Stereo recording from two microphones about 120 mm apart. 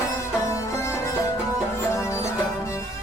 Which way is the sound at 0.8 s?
25° left (ahead or behind).